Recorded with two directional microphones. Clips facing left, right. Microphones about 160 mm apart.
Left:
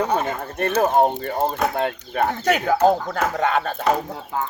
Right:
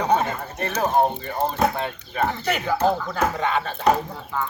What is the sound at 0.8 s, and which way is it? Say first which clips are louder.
Chop: left 2 dB; 50° left (ahead or behind).